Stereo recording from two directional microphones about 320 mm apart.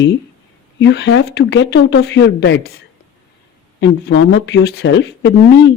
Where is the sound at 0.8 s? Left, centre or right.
Left.